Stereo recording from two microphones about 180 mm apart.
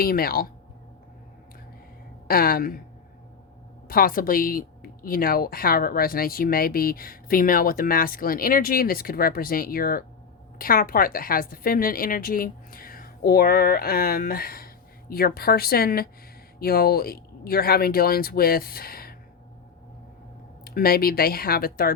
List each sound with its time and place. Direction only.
0.0 s speech: 55° left (ahead or behind)
2.2 s speech: 55° left (ahead or behind)
3.8 s speech: 55° left (ahead or behind)
20.7 s speech: 55° left (ahead or behind)